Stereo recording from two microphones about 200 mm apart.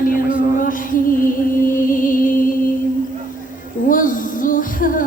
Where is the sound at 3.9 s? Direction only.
40° left (ahead or behind).